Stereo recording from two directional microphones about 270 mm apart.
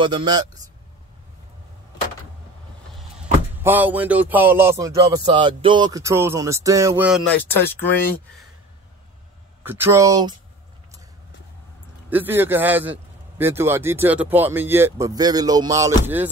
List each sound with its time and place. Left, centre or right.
0.0 s speech: centre
3.5 s speech: centre
9.6 s speech: centre
12.1 s speech: centre